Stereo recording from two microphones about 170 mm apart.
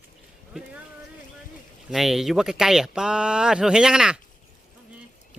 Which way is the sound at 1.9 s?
Centre (ahead or behind).